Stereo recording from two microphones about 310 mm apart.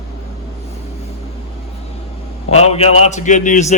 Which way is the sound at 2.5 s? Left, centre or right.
Centre.